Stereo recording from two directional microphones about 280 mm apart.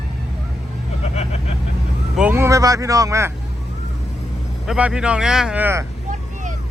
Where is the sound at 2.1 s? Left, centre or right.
Centre.